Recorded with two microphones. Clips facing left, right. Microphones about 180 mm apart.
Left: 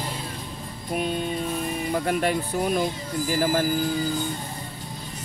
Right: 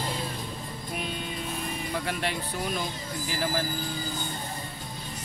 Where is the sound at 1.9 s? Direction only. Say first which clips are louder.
Left 8 dB; 45° left (ahead or behind).